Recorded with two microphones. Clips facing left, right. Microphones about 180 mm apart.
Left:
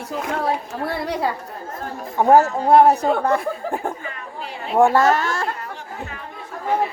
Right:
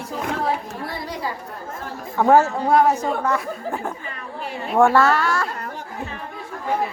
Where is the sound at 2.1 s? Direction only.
15° left (ahead or behind).